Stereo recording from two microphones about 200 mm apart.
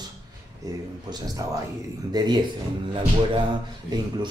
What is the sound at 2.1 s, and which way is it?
Speech, 20° right (ahead or behind).